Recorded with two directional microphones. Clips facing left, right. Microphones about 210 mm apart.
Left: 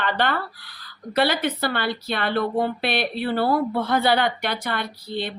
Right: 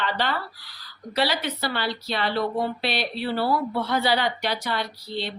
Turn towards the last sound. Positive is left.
turn(degrees=55)  # may be behind; listen again after turning